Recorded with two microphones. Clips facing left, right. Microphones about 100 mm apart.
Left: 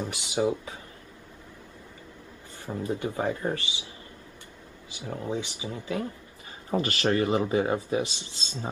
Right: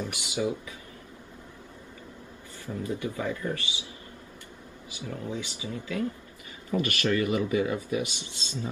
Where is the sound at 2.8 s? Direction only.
30° left (ahead or behind).